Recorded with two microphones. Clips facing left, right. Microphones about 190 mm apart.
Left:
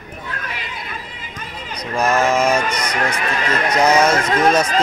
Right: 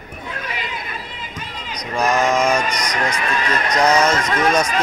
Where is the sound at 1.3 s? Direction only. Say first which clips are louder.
Left 2 dB; 50° left (ahead or behind).